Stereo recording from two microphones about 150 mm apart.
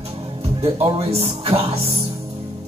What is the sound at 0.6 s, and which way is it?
A man's voice, 40° right (ahead or behind).